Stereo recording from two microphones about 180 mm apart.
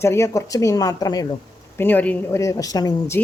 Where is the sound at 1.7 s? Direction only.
10° left (ahead or behind).